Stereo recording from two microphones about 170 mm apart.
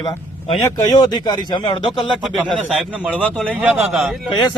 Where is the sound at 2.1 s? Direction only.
Centre (ahead or behind).